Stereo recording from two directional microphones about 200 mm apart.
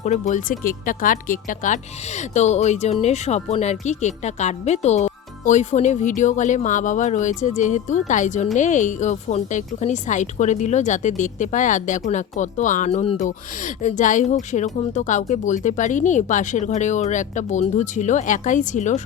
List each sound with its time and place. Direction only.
0.0 s a woman's voice: 35° left (ahead or behind)